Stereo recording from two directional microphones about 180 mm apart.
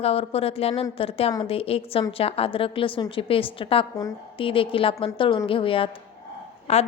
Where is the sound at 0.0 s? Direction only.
35° left (ahead or behind).